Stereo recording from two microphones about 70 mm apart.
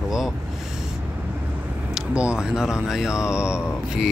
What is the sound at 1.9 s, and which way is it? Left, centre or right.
Speech, centre.